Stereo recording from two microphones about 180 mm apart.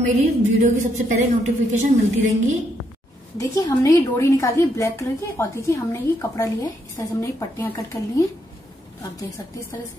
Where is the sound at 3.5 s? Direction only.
20° left (ahead or behind).